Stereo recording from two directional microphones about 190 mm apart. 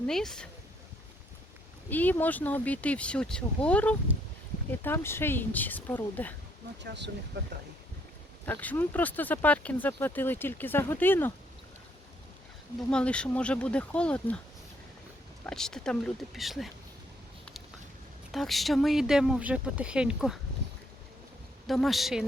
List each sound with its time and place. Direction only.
0.1 s speech: 5° left (ahead or behind)
1.9 s speech: 10° left (ahead or behind)
6.8 s speech: 65° right (ahead or behind)
8.4 s speech: 10° left (ahead or behind)
12.9 s speech: 5° left (ahead or behind)
15.4 s speech: 5° left (ahead or behind)
18.3 s speech: centre (ahead or behind)
21.7 s speech: centre (ahead or behind)